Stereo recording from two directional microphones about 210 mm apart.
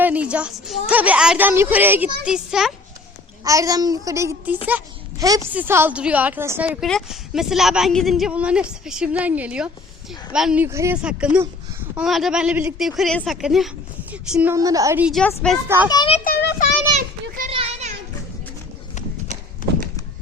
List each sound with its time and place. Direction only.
0.0 s a child's voice: 5° right (ahead or behind)
3.4 s a child's voice: 15° right (ahead or behind)
15.2 s a woman's voice: 10° left (ahead or behind)
15.9 s a child's voice: 20° left (ahead or behind)
16.1 s a child's voice: 45° left (ahead or behind)
17.0 s children playing: 40° right (ahead or behind)
17.5 s a sound: 30° right (ahead or behind)